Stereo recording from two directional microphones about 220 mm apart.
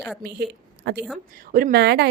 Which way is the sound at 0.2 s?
50° right (ahead or behind).